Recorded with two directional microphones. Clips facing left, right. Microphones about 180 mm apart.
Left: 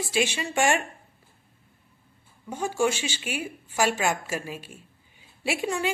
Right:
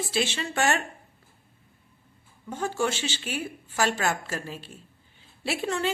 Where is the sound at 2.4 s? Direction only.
10° left (ahead or behind).